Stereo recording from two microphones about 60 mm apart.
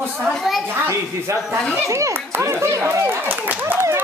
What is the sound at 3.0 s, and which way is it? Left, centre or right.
Speech, right.